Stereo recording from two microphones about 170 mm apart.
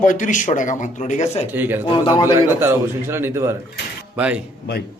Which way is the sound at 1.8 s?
30° left (ahead or behind).